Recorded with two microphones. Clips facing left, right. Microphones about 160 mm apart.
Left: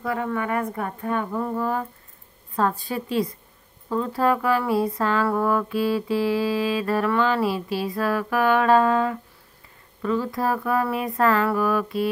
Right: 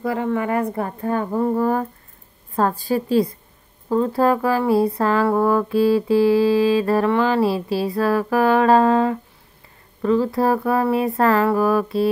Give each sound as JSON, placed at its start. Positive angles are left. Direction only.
{"t": 0.0, "sound": "speech", "side_deg": -30}